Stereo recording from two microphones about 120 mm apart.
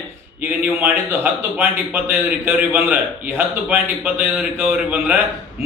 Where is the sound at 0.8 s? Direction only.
20° right (ahead or behind).